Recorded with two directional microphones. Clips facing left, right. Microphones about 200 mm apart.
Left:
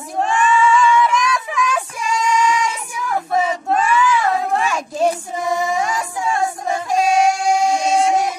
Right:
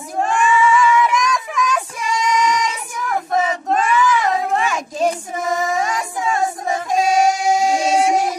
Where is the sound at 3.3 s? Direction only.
Centre (ahead or behind).